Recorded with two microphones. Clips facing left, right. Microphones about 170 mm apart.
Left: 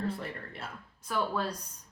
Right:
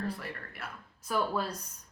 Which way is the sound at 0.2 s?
25° left (ahead or behind).